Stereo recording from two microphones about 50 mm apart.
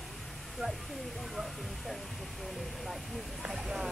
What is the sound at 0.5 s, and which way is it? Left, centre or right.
Speech, centre.